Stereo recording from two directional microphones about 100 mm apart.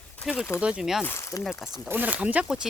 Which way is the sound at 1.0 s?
25° left (ahead or behind).